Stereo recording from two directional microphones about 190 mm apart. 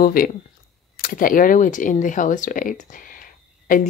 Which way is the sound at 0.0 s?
50° left (ahead or behind).